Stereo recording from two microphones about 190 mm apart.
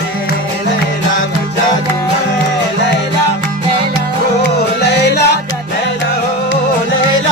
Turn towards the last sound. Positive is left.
turn(degrees=60)  # may be behind; listen again after turning